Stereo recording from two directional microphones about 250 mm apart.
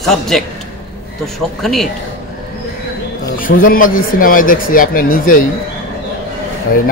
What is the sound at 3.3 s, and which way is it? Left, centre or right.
Speech, left.